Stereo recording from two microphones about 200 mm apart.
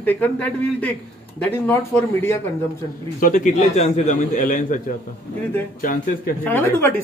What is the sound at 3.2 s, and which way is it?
A man's voice, 40° left (ahead or behind).